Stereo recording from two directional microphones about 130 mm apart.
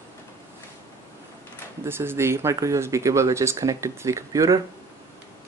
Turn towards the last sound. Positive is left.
turn(degrees=-25)  # may be behind; listen again after turning